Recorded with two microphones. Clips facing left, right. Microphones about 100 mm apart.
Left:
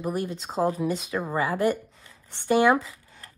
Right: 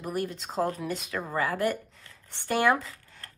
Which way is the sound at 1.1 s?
15° left (ahead or behind).